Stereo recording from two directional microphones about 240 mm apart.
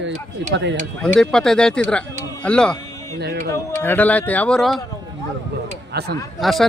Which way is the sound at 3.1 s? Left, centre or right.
Right.